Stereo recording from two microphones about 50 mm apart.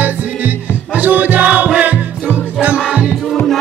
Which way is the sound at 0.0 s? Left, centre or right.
Right.